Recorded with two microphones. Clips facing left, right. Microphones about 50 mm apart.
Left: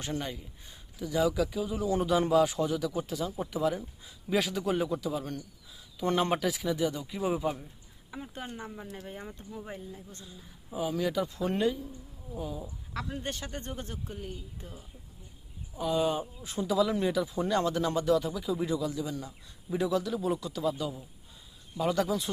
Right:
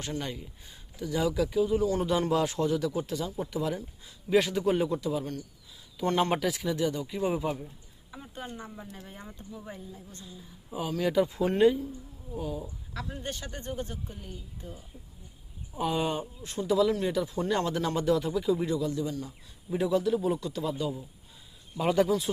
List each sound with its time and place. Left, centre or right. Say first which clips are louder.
0.2 s speech: right 1 dB; centre
8.4 s speech: even; left
9.6 s speech: left 1 dB; left
10.2 s speech: right 2 dB; centre
11.1 s speech: right 5 dB; centre
13.2 s speech: even; left
15.9 s speech: left 2 dB; centre
16.1 s speech: even; centre